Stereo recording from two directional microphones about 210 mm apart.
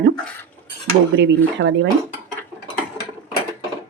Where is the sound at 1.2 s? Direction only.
60° right (ahead or behind).